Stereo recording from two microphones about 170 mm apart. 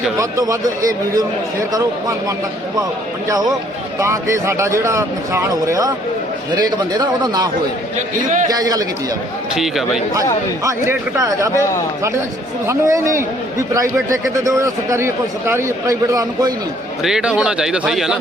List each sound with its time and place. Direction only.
0.2 s a man's voice: 20° right (ahead or behind)
7.9 s a man's voice: 45° right (ahead or behind)
8.4 s a man's voice: 20° right (ahead or behind)
9.6 s a man's voice: centre (ahead or behind)
10.6 s a man's voice: 20° right (ahead or behind)
12.6 s a man's voice: 15° right (ahead or behind)
17.0 s a man's voice: 5° right (ahead or behind)